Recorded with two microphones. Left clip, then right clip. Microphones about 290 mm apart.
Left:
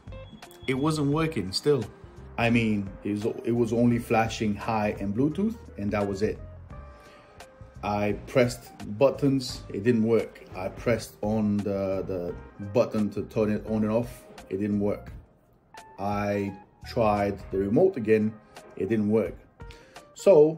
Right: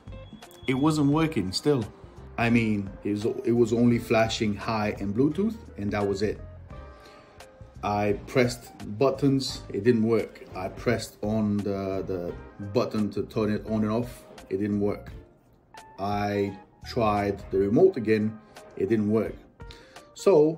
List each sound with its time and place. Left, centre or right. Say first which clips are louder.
0.7 s speech: right 2 dB; centre
7.8 s speech: right 2 dB; centre
16.0 s speech: right 1 dB; centre